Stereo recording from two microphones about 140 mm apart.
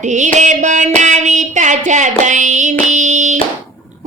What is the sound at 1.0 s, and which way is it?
Singing, 60° right (ahead or behind).